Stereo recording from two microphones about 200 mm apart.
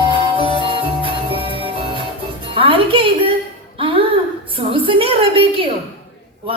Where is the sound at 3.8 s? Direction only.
25° right (ahead or behind).